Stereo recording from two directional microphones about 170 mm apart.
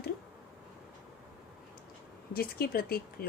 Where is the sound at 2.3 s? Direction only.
65° left (ahead or behind).